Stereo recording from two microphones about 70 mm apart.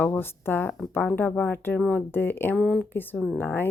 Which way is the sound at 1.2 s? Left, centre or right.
Centre.